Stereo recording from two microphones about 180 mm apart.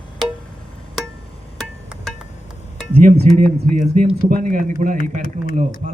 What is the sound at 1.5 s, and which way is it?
Music, centre (ahead or behind).